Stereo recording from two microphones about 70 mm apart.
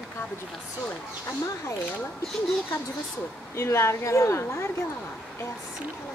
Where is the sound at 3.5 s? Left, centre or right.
Left.